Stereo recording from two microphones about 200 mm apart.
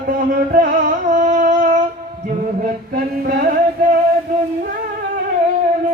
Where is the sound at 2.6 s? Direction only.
50° right (ahead or behind).